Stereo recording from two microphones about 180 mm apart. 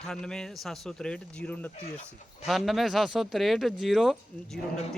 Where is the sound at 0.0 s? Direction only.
5° left (ahead or behind).